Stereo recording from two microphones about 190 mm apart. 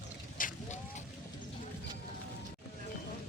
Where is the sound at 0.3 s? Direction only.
45° left (ahead or behind).